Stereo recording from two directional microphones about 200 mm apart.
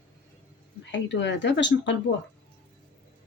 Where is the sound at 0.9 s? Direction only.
65° left (ahead or behind).